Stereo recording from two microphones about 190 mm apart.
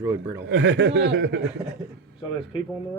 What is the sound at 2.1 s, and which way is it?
Speech, 25° left (ahead or behind).